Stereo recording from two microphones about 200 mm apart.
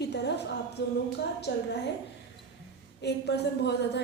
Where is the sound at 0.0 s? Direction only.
55° left (ahead or behind).